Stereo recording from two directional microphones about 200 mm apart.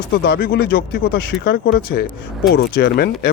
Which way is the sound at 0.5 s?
65° left (ahead or behind).